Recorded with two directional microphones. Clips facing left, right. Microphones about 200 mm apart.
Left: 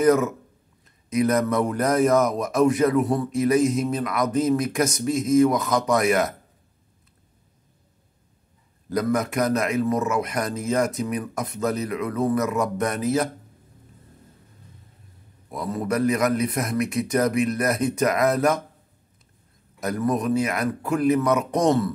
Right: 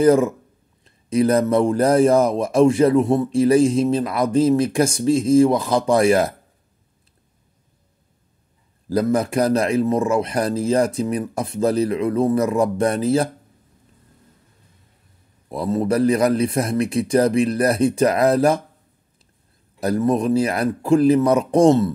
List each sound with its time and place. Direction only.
0.0 s speech: 30° right (ahead or behind)
8.8 s a man's voice: 30° right (ahead or behind)
15.5 s a man's voice: 30° right (ahead or behind)
19.8 s speech: 30° right (ahead or behind)